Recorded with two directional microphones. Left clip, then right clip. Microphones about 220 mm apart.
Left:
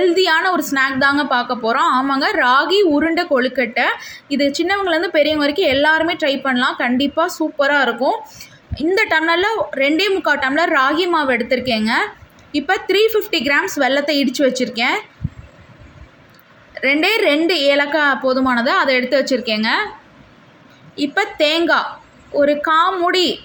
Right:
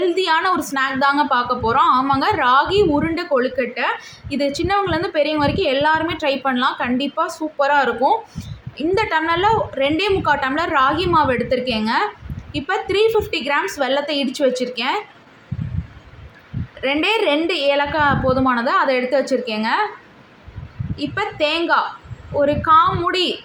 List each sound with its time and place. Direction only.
0.0 s speech: 10° left (ahead or behind)
16.8 s speech: 15° left (ahead or behind)
20.9 s speech: 15° left (ahead or behind)